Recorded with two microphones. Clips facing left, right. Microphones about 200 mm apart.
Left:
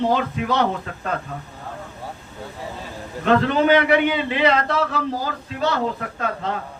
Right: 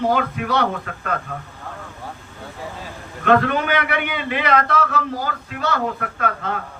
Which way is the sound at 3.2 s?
25° left (ahead or behind).